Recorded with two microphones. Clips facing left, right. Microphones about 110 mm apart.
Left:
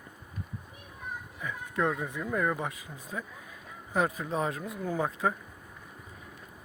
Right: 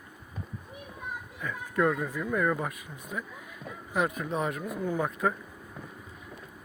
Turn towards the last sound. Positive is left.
turn(degrees=30)  # may be behind; listen again after turning